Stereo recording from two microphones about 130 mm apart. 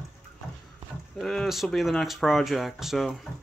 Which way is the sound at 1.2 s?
Centre (ahead or behind).